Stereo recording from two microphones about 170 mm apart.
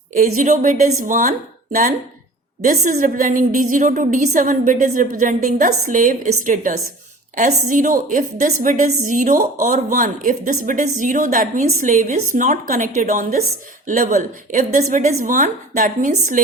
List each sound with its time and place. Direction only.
0.2 s a woman's voice: 45° right (ahead or behind)
2.6 s a woman's voice: 50° right (ahead or behind)